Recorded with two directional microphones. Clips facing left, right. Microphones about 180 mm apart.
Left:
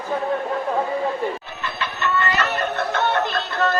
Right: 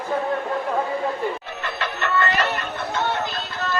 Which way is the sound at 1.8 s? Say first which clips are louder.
Even; 60° right (ahead or behind).